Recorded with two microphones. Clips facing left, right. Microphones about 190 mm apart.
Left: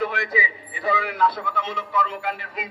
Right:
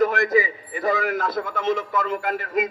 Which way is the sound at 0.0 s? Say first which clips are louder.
Right 6 dB; 45° right (ahead or behind).